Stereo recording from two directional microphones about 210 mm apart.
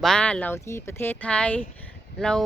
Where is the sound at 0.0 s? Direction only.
5° left (ahead or behind).